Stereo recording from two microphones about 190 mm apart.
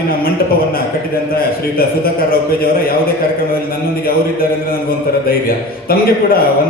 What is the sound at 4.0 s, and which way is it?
A man's voice, 50° left (ahead or behind).